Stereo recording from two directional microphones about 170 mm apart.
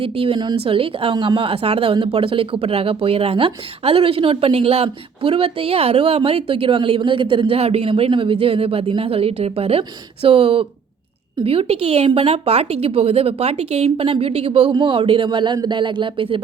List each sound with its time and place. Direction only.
0.0 s a woman's voice: 35° right (ahead or behind)